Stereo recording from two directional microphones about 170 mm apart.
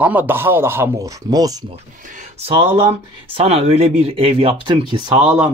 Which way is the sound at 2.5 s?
30° right (ahead or behind).